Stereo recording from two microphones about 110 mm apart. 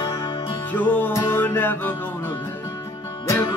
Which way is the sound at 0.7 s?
15° left (ahead or behind).